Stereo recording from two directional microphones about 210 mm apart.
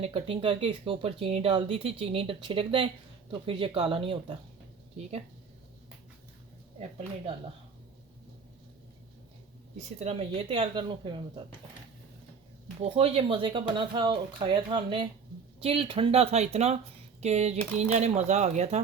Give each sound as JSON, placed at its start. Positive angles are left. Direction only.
{"t": 0.0, "sound": "speech", "side_deg": -25}
{"t": 9.7, "sound": "speech", "side_deg": -30}
{"t": 12.8, "sound": "speech", "side_deg": -30}